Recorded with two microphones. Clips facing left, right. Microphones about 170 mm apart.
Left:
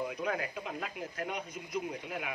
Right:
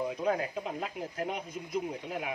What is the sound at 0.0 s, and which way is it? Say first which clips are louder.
Speech: right 4 dB; 30° right (ahead or behind).